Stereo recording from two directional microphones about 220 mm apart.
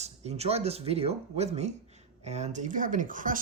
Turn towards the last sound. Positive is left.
turn(degrees=-40)  # may be behind; listen again after turning